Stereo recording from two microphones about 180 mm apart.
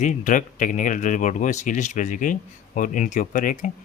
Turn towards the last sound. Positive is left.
turn(degrees=45)  # may be behind; listen again after turning